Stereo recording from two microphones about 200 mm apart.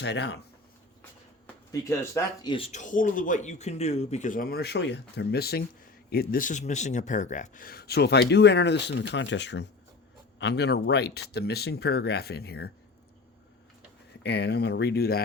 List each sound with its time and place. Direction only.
0.0 s speech: 60° left (ahead or behind)
1.7 s speech: 15° left (ahead or behind); by 12.7 s 55° left (ahead or behind)
14.3 s speech: 55° left (ahead or behind)